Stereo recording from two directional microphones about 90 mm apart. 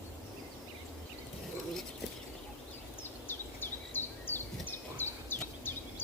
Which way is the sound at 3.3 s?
25° left (ahead or behind).